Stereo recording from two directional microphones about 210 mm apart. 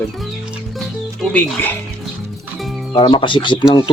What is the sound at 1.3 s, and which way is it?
Speech, 10° left (ahead or behind).